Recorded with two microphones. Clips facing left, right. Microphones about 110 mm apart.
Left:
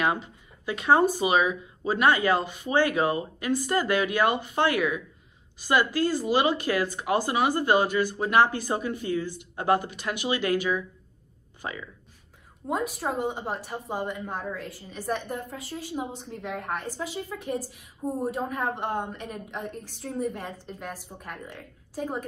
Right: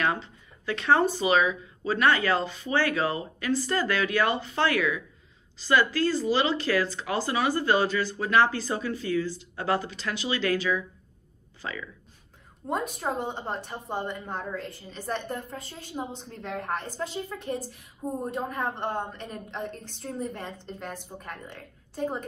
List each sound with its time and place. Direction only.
0.0 s a woman's voice: 15° left (ahead or behind)
12.6 s a woman's voice: 5° left (ahead or behind)